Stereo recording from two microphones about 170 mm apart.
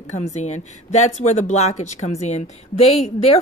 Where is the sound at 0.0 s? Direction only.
45° left (ahead or behind).